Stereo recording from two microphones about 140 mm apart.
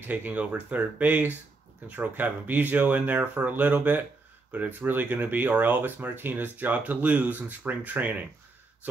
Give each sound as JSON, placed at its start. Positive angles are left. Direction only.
{"t": 0.0, "sound": "speech", "side_deg": -15}